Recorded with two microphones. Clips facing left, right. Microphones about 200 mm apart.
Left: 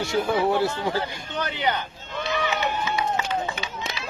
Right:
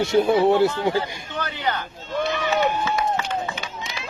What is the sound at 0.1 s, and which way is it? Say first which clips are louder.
Speech: right 5 dB; 20° right (ahead or behind).